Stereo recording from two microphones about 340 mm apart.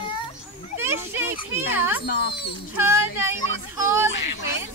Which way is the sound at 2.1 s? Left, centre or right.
Left.